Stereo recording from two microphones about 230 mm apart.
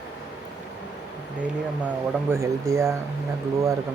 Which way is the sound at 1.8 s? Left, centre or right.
Centre.